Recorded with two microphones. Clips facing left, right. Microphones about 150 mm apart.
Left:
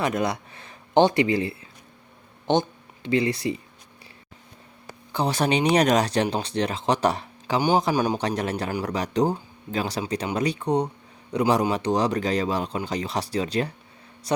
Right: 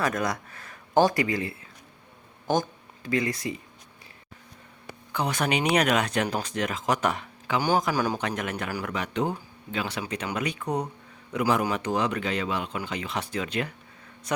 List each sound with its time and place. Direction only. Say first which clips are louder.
0.0 s speech: left 3 dB; 25° left (ahead or behind)
5.1 s a man's voice: left 4 dB; 30° left (ahead or behind)